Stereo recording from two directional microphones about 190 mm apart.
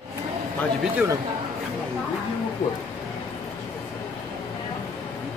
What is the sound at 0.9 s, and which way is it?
Speech, 15° right (ahead or behind).